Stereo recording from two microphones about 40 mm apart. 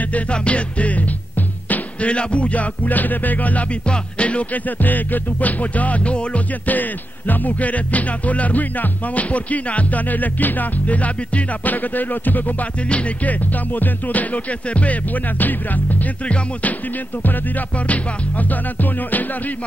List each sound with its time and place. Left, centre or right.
0.1 s music: left
3.8 s music: left
4.6 s music: left
12.9 s music: left
17.2 s music: left
17.7 s music: left